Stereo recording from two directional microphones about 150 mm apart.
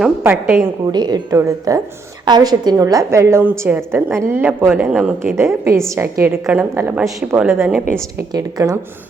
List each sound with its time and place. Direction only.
0.2 s a woman's voice: 15° right (ahead or behind)
0.9 s a woman's voice: 30° right (ahead or behind); by 5.4 s 5° right (ahead or behind)
5.4 s a woman's voice: 15° right (ahead or behind)
8.3 s a woman's voice: 25° right (ahead or behind)